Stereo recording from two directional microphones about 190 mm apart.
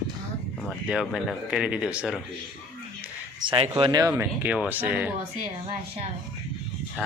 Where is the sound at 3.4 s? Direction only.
25° right (ahead or behind); by 5.1 s 10° right (ahead or behind).